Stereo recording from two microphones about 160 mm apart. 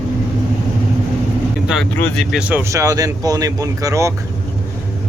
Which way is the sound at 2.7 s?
20° right (ahead or behind).